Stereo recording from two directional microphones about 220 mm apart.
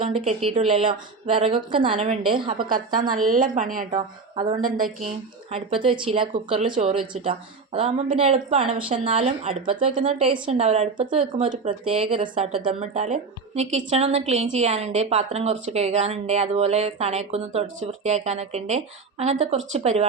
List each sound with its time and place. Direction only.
0.4 s a woman's voice: 25° right (ahead or behind)
2.6 s a woman's voice: 40° right (ahead or behind); by 6.7 s 25° right (ahead or behind)
6.7 s a woman's voice: 35° right (ahead or behind)